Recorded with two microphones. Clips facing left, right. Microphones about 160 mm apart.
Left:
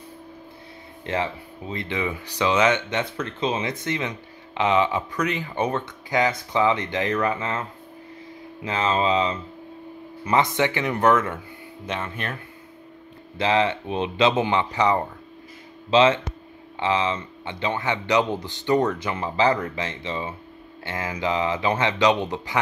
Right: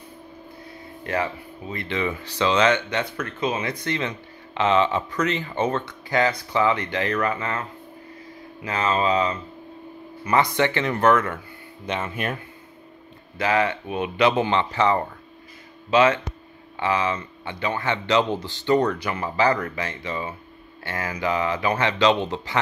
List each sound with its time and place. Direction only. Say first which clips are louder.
1.0 s speech: even; 25° left (ahead or behind)
8.6 s speech: even; 25° left (ahead or behind)
11.8 s speech: right 2 dB; centre (ahead or behind)
13.4 s speech: left 1 dB; 25° left (ahead or behind)